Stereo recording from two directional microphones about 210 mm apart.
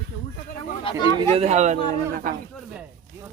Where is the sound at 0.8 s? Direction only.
20° left (ahead or behind).